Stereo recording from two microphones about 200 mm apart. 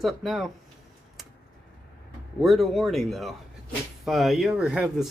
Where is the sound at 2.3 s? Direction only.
Centre (ahead or behind).